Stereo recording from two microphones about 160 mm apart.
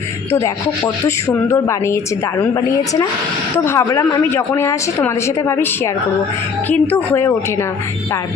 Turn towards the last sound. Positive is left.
turn(degrees=15)  # may be behind; listen again after turning